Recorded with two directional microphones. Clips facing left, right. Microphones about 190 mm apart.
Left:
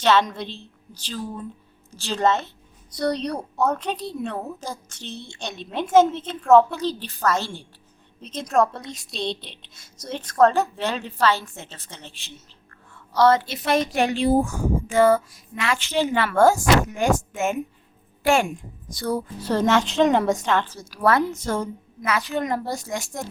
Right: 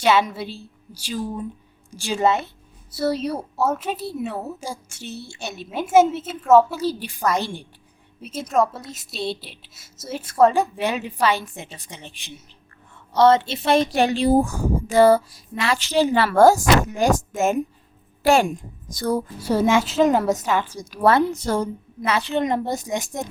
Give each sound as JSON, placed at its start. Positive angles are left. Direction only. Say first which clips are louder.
{"t": 0.0, "sound": "a woman's voice", "louder": "right 1 dB", "side_deg": -10}
{"t": 19.4, "sound": "a woman's voice", "louder": "right 1 dB", "side_deg": -10}
{"t": 20.9, "sound": "a woman's voice", "louder": "right 3 dB", "side_deg": -25}